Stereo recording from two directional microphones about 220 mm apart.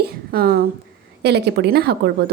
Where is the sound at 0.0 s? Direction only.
45° right (ahead or behind).